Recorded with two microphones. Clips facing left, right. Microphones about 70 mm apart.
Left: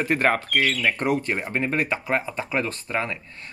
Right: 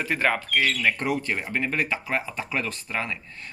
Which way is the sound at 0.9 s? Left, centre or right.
Left.